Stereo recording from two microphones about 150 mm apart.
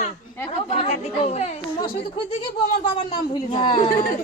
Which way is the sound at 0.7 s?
40° left (ahead or behind).